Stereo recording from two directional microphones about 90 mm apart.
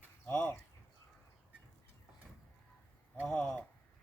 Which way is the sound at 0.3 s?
20° left (ahead or behind).